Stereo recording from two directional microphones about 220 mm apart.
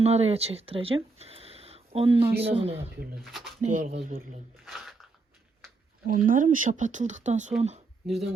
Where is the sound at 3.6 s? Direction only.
35° right (ahead or behind).